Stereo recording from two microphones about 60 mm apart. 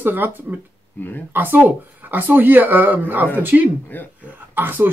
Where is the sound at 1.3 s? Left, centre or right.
Right.